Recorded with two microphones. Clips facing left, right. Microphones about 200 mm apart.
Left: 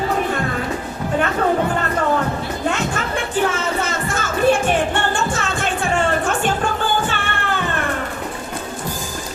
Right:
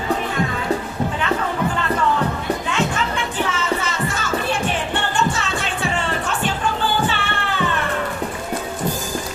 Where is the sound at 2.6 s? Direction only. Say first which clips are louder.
Left 1 dB; 50° left (ahead or behind).